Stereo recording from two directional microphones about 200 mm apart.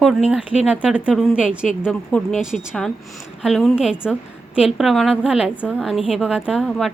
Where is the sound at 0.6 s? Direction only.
5° right (ahead or behind).